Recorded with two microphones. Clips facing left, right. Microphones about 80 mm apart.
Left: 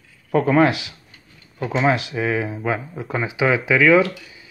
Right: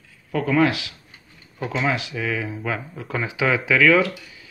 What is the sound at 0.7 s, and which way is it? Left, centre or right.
Speech, left.